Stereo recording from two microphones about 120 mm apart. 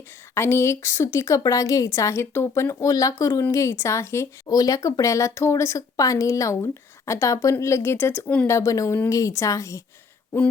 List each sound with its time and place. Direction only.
0.3 s speech: 20° left (ahead or behind)